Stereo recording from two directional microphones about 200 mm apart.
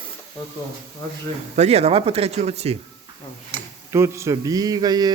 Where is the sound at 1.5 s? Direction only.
30° right (ahead or behind).